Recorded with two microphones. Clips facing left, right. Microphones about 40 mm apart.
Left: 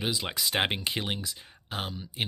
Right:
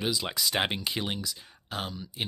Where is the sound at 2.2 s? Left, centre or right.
Left.